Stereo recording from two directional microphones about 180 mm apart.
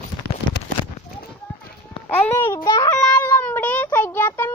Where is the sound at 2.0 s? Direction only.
10° left (ahead or behind).